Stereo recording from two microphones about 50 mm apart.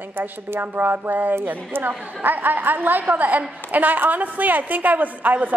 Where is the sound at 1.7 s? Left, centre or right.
Right.